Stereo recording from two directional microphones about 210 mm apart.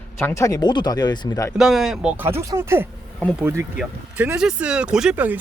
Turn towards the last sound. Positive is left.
turn(degrees=-5)  # may be behind; listen again after turning